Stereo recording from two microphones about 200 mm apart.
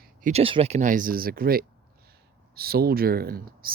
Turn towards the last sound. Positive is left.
turn(degrees=-45)  # may be behind; listen again after turning